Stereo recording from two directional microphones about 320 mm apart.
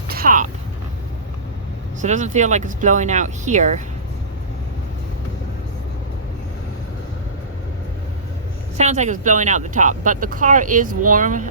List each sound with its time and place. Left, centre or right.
0.1 s speech: right
2.0 s speech: right
8.8 s speech: right